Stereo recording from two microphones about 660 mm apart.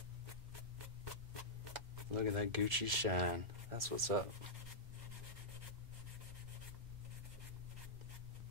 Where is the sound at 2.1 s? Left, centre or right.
Right.